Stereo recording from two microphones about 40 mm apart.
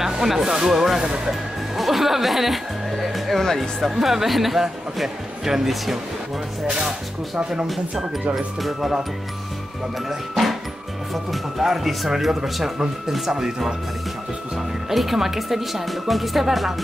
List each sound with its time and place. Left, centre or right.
0.0 s speech: centre
1.8 s music: centre
3.3 s speech: centre
3.9 s speech: centre
8.6 s speech: centre
10.0 s speech: centre
12.7 s speech: centre
14.9 s speech: centre